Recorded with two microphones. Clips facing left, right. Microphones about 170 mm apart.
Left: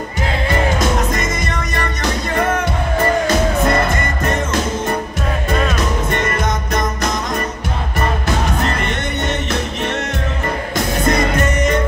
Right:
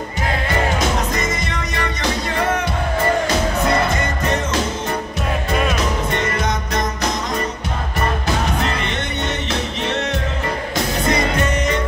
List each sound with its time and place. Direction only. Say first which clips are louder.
1.1 s music: left 2 dB; 45° left (ahead or behind)
3.9 s music: left 1 dB; 50° left (ahead or behind)
6.1 s music: left 2 dB; 50° left (ahead or behind)
8.6 s music: left 2 dB; 45° left (ahead or behind)
11.1 s music: left 3 dB; 45° left (ahead or behind)